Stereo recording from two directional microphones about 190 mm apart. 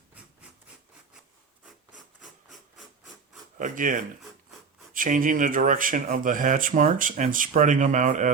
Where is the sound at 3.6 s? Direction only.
45° right (ahead or behind).